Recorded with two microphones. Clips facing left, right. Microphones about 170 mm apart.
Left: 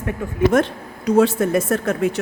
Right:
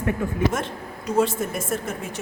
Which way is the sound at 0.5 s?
70° left (ahead or behind).